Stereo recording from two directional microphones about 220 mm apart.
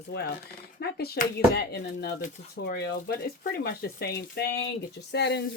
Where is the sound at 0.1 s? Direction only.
50° left (ahead or behind).